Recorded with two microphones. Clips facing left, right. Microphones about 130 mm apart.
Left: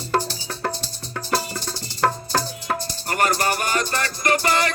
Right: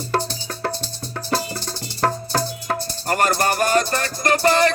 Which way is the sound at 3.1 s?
45° right (ahead or behind).